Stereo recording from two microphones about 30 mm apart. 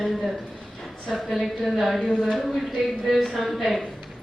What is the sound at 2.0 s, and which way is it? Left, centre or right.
Speech, left.